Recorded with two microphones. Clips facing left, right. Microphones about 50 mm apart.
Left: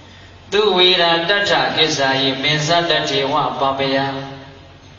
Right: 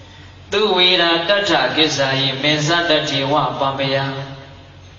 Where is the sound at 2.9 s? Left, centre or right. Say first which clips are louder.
Even; left.